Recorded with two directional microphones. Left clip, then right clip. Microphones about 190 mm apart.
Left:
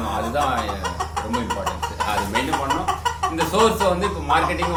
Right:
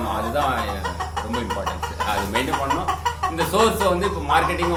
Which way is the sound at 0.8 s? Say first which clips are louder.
Left 1 dB; 50° left (ahead or behind).